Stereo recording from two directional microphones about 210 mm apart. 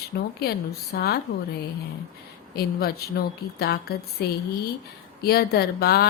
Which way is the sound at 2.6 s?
50° left (ahead or behind).